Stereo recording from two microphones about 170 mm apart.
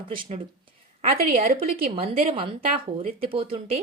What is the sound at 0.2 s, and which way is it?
A woman's voice, 30° right (ahead or behind).